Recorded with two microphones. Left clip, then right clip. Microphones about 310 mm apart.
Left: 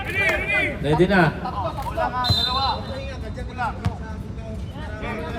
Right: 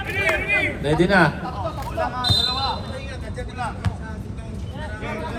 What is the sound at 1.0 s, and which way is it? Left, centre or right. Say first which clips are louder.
Speech: right 2 dB; centre.